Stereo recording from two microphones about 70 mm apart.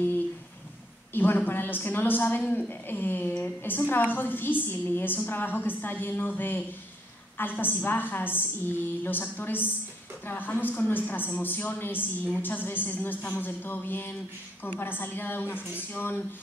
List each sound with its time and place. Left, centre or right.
1.1 s a woman's voice: left